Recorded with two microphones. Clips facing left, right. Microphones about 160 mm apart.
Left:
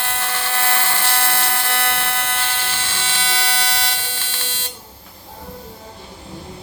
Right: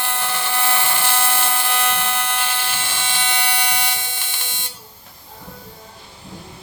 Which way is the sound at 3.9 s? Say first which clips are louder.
Even; 15° right (ahead or behind).